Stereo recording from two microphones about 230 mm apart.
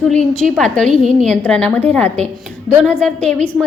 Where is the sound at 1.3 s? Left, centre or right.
Centre.